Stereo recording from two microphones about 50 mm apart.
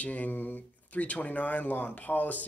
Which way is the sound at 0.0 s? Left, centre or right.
Left.